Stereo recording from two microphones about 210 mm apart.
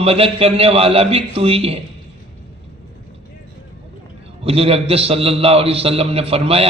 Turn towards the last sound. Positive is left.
turn(degrees=-30)  # may be behind; listen again after turning